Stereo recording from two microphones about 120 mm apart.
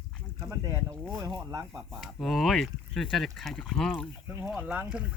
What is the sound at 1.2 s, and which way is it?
Speech, 35° right (ahead or behind).